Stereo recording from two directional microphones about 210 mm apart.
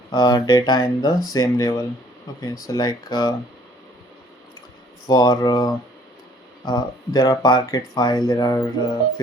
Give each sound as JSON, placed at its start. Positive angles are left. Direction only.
{"t": 0.1, "sound": "speech", "side_deg": 20}
{"t": 5.0, "sound": "speech", "side_deg": 20}